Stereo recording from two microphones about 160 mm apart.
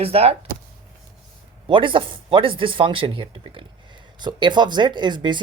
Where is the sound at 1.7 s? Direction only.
30° right (ahead or behind).